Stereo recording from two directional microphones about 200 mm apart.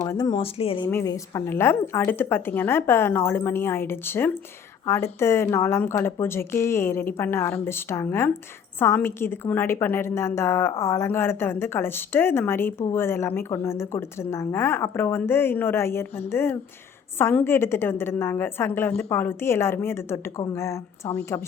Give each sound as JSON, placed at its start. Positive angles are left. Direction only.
{"t": 0.0, "sound": "speech", "side_deg": 15}
{"t": 0.9, "sound": "a woman's voice", "side_deg": 15}